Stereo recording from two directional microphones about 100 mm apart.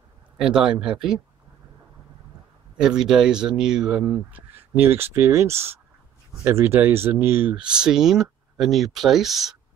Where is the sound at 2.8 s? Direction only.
5° right (ahead or behind); by 7.5 s 20° right (ahead or behind).